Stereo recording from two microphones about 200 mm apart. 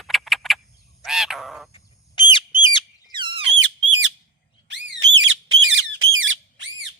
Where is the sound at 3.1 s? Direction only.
25° right (ahead or behind).